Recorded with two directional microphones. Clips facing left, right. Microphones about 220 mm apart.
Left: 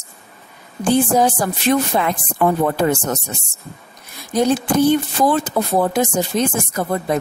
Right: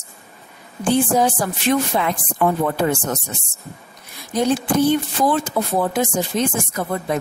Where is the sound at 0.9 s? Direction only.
40° left (ahead or behind).